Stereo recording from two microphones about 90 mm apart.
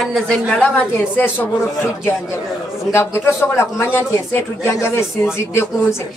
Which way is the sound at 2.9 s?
25° left (ahead or behind).